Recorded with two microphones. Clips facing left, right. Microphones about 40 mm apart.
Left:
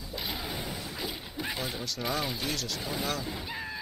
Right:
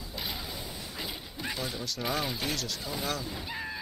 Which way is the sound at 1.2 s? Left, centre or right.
Centre.